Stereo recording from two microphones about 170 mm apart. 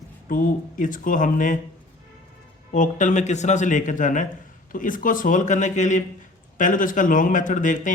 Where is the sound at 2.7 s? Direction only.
50° left (ahead or behind).